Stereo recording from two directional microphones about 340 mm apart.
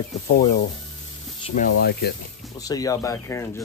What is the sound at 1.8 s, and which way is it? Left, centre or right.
Speech, left.